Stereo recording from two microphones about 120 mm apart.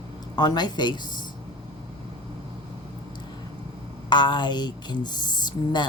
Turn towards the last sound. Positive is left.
turn(degrees=35)  # may be behind; listen again after turning